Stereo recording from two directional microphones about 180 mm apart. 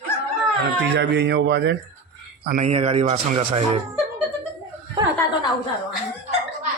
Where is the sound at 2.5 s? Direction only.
40° right (ahead or behind).